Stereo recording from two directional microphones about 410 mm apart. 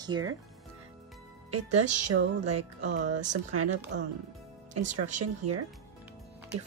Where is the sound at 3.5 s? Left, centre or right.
Right.